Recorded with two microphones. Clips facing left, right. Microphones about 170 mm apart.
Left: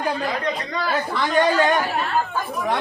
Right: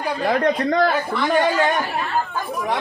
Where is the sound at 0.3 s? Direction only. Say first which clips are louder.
Right 7 dB; 60° right (ahead or behind).